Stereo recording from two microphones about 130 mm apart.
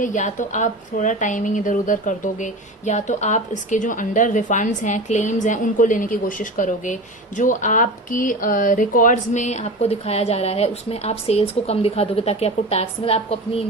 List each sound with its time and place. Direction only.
0.0 s a woman's voice: 70° left (ahead or behind); by 13.7 s 50° left (ahead or behind)